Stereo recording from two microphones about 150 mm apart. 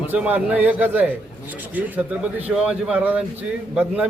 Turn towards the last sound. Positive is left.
turn(degrees=-10)  # may be behind; listen again after turning